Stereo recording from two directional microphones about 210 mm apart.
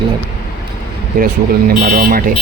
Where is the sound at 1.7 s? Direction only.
40° right (ahead or behind).